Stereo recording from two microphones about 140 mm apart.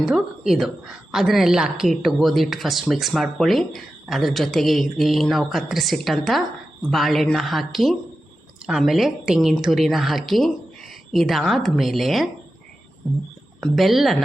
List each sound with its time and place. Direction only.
0.0 s a woman's voice: 5° right (ahead or behind)
13.6 s a woman's voice: centre (ahead or behind)